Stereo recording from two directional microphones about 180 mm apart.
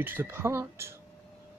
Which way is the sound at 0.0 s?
10° right (ahead or behind).